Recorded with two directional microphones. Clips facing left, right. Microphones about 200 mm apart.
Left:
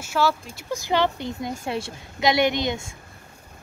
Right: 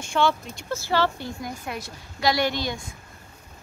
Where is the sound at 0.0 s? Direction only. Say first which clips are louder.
Even; 5° left (ahead or behind); by 2.9 s 20° left (ahead or behind).